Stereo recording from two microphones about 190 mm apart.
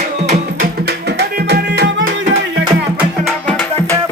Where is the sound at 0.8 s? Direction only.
60° right (ahead or behind).